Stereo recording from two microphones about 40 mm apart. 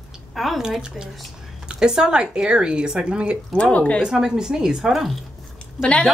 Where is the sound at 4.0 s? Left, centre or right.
Centre.